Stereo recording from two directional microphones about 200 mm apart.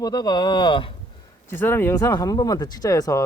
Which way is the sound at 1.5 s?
10° left (ahead or behind).